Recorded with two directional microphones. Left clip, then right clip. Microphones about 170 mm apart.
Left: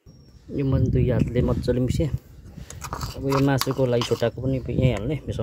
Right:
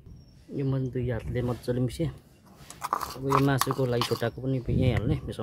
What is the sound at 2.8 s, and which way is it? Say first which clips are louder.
Speech: right 2 dB; centre (ahead or behind).